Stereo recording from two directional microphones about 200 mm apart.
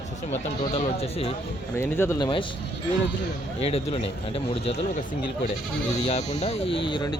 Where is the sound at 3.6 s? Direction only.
30° left (ahead or behind).